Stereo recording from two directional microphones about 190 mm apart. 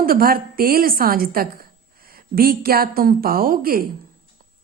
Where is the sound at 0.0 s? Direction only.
50° right (ahead or behind).